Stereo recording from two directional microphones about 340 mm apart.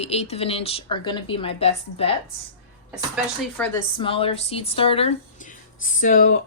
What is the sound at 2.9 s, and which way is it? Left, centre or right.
Speech, centre.